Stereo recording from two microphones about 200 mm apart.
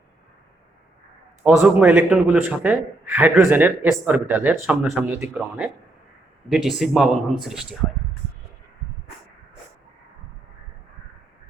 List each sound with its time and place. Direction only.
1.5 s a man's voice: 10° right (ahead or behind)